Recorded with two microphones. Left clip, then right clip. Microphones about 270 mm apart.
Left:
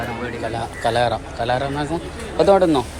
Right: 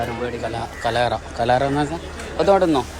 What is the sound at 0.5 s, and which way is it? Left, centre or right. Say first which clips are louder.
A man's voice: left 4 dB; centre.